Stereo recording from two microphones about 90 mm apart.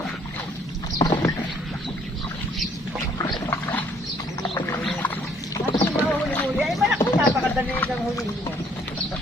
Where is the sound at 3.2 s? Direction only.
55° left (ahead or behind).